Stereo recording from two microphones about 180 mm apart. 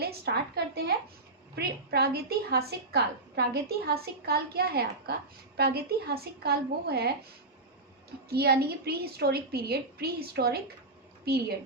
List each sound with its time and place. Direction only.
0.0 s a woman's voice: 60° right (ahead or behind)
8.3 s a woman's voice: 65° right (ahead or behind)